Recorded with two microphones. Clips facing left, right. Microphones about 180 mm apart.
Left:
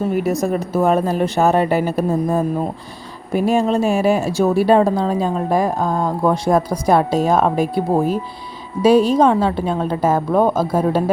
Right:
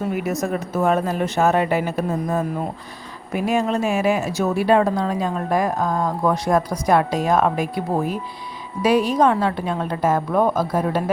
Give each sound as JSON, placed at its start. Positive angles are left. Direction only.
{"t": 0.1, "sound": "a woman's voice", "side_deg": 35}